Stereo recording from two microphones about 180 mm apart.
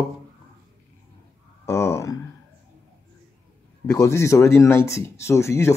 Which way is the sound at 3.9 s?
15° left (ahead or behind).